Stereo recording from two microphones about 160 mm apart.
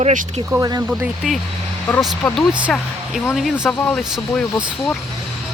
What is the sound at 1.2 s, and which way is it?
Speech, centre (ahead or behind).